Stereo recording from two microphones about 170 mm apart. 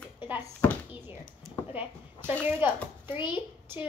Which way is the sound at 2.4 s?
15° right (ahead or behind).